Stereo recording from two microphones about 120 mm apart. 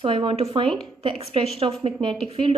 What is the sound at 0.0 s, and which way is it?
A woman's voice, 50° right (ahead or behind).